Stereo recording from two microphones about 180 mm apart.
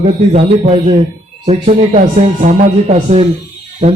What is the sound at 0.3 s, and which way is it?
Speech, 35° right (ahead or behind).